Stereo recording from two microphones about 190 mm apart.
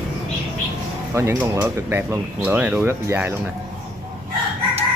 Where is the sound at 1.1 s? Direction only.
15° right (ahead or behind).